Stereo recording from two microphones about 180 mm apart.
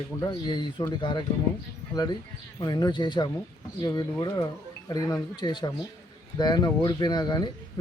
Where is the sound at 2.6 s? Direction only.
25° left (ahead or behind).